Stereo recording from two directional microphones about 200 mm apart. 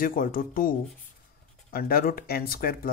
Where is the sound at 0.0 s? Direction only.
45° left (ahead or behind).